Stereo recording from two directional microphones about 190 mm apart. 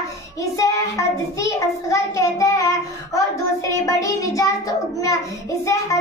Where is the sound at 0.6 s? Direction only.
15° left (ahead or behind).